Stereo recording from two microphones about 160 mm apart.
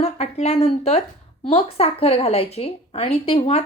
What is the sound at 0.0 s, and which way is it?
A woman's voice, 40° left (ahead or behind).